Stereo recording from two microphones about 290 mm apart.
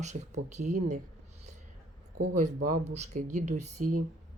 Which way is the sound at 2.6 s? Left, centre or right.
Right.